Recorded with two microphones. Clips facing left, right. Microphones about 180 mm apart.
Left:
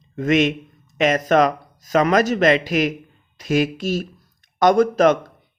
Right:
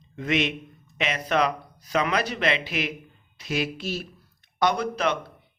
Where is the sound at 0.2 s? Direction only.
45° left (ahead or behind).